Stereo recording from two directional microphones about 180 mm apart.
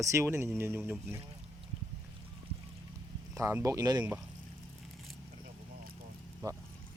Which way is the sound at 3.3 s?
15° right (ahead or behind).